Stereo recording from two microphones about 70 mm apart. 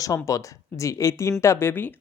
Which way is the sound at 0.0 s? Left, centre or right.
Left.